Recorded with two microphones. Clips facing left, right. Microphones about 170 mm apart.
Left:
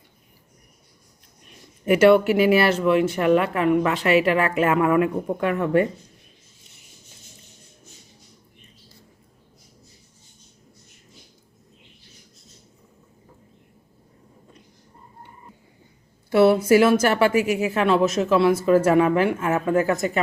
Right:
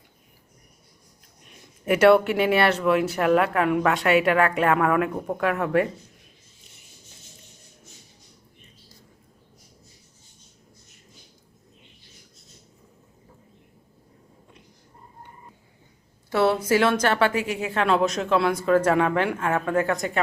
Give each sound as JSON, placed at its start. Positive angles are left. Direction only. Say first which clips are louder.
{"t": 1.8, "sound": "speech", "louder": "left 2 dB", "side_deg": 0}
{"t": 16.3, "sound": "a woman's voice", "louder": "left 5 dB", "side_deg": 10}